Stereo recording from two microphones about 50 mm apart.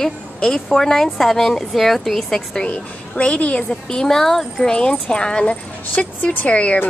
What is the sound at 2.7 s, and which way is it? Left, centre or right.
Speech, left.